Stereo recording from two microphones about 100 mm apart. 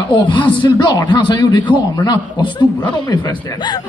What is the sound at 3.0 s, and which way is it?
Speech, 45° left (ahead or behind).